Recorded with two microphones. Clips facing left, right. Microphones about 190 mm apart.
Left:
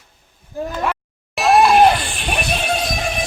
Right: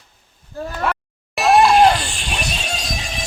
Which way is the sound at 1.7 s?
55° left (ahead or behind).